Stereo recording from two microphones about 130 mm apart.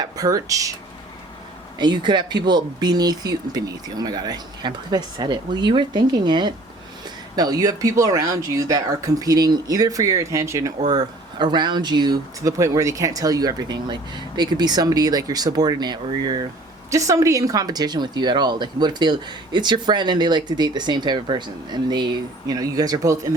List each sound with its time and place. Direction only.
0.0 s speech: 30° right (ahead or behind)
1.8 s speech: 35° right (ahead or behind)